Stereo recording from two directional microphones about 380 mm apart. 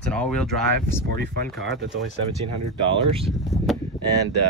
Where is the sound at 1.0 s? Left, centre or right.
Right.